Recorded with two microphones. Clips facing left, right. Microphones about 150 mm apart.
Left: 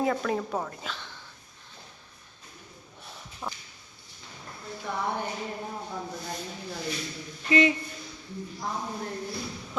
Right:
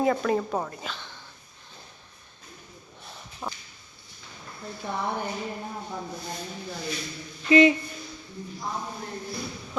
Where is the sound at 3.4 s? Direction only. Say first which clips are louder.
Right 1 dB; 10° right (ahead or behind).